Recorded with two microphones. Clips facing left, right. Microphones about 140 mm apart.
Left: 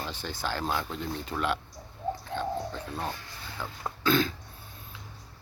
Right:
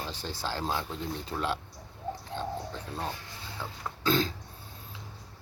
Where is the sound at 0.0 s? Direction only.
30° right (ahead or behind).